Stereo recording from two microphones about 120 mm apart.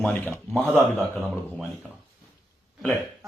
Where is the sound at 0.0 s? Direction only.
15° left (ahead or behind).